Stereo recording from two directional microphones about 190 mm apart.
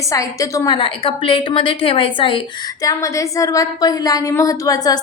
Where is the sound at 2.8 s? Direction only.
15° left (ahead or behind).